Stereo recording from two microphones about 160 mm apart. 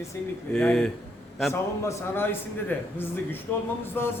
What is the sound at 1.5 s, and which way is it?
A man's voice, 15° left (ahead or behind).